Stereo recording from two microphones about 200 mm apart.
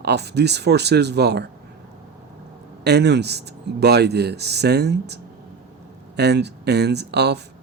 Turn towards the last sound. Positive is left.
turn(degrees=-55)  # may be behind; listen again after turning